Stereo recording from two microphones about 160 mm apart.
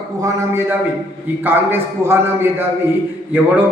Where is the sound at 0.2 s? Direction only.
15° right (ahead or behind).